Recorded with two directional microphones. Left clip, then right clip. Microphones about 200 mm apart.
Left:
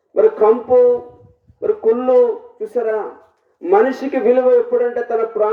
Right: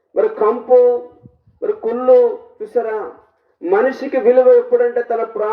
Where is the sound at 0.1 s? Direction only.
50° right (ahead or behind).